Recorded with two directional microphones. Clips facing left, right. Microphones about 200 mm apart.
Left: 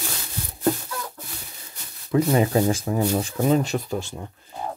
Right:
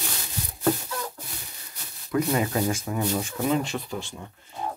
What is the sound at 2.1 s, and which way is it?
Speech, 30° left (ahead or behind).